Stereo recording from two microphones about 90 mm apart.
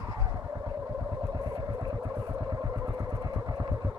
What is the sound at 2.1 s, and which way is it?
Vehicle, 30° right (ahead or behind).